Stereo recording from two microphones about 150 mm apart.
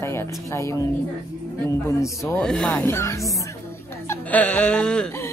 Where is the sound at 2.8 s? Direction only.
15° left (ahead or behind).